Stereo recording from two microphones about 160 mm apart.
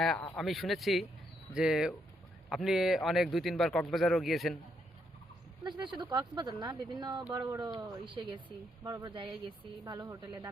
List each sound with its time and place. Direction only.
0.0 s speech: 5° left (ahead or behind)
5.6 s speech: 30° right (ahead or behind)